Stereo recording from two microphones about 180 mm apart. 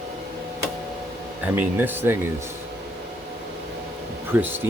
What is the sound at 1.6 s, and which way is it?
Speech, 10° right (ahead or behind).